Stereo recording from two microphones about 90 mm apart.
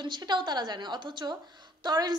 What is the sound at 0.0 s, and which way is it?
A woman's voice, 55° right (ahead or behind).